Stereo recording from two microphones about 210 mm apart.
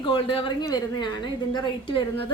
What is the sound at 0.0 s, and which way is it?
A woman's voice, 25° left (ahead or behind).